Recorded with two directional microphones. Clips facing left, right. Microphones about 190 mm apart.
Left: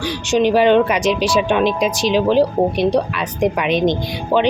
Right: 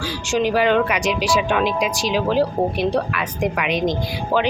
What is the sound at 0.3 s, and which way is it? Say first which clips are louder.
A woman's voice: left 5 dB; 20° left (ahead or behind).